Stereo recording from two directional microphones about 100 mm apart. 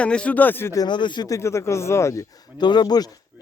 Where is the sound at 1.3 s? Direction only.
30° left (ahead or behind).